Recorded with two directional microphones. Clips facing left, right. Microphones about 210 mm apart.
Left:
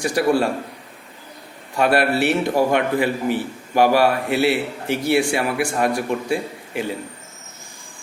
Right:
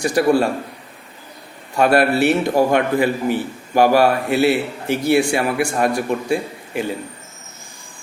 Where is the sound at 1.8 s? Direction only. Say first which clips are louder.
Right 3 dB; 45° right (ahead or behind).